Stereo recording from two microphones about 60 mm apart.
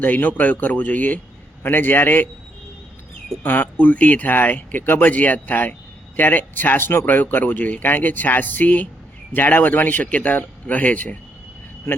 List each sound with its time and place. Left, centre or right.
0.0 s speech: left
3.4 s speech: left
11.9 s vehicle: left